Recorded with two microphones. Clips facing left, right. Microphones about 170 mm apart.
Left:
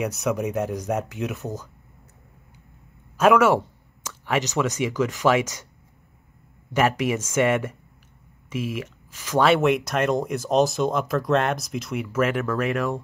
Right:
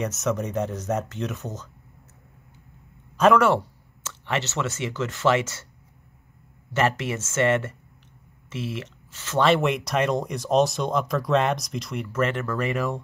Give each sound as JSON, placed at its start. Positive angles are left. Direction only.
{"t": 0.0, "sound": "speech", "side_deg": 10}
{"t": 3.2, "sound": "speech", "side_deg": 5}
{"t": 6.7, "sound": "speech", "side_deg": 10}
{"t": 9.5, "sound": "speech", "side_deg": 0}